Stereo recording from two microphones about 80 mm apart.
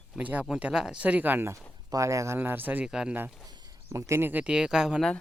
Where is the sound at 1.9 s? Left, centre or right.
Right.